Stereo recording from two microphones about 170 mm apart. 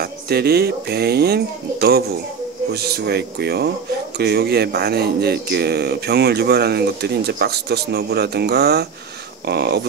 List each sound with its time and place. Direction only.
0.0 s speech: 70° right (ahead or behind)